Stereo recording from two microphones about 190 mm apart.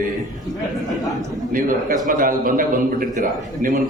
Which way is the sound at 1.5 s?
45° right (ahead or behind).